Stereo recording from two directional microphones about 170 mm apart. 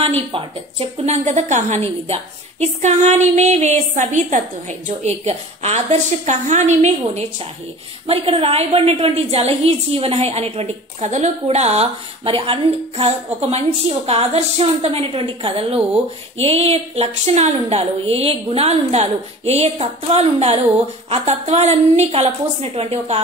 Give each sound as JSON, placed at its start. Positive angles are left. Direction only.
{"t": 0.3, "sound": "a woman's voice", "side_deg": -30}